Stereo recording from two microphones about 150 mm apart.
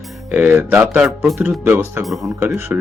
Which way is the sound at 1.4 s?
10° right (ahead or behind).